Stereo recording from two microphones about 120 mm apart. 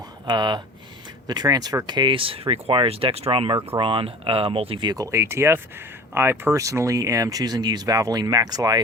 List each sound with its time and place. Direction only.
0.3 s speech: 35° right (ahead or behind)
4.9 s speech: 25° right (ahead or behind)